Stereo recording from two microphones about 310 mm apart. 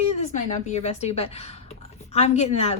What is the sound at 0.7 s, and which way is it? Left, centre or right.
A woman's voice, left.